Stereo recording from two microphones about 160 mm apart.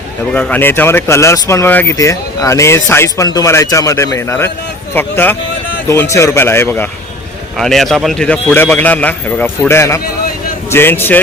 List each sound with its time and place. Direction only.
0.3 s speech: 10° left (ahead or behind)
7.5 s speech: centre (ahead or behind)